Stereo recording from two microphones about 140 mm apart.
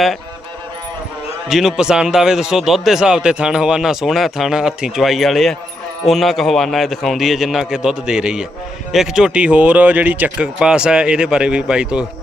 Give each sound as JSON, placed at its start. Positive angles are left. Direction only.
{"t": 1.5, "sound": "a man's voice", "side_deg": 0}